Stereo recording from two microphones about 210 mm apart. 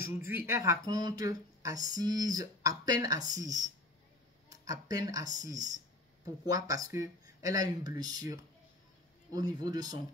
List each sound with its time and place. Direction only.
0.0 s speech: 10° right (ahead or behind)
4.5 s a sound: 15° right (ahead or behind)
5.1 s speech: 15° right (ahead or behind)